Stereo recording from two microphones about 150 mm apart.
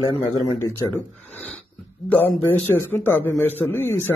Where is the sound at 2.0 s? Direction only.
10° left (ahead or behind).